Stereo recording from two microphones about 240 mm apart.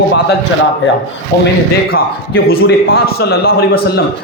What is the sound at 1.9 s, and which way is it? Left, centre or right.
A man's voice, left.